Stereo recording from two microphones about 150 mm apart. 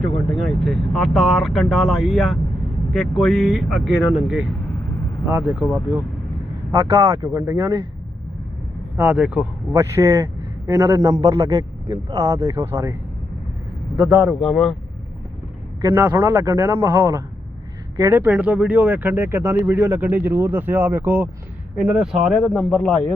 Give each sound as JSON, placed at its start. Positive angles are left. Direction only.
{"t": 0.0, "sound": "speech", "side_deg": 5}
{"t": 6.8, "sound": "a man's voice", "side_deg": -40}
{"t": 7.1, "sound": "speech", "side_deg": -15}
{"t": 9.0, "sound": "speech", "side_deg": -10}
{"t": 9.7, "sound": "a man's voice", "side_deg": -20}
{"t": 14.4, "sound": "speech", "side_deg": 0}
{"t": 16.1, "sound": "speech", "side_deg": -20}
{"t": 16.8, "sound": "a man's voice", "side_deg": -30}
{"t": 18.0, "sound": "speech", "side_deg": -15}